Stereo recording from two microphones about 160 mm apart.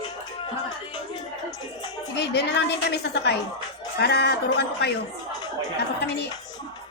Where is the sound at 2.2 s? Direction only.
90° left.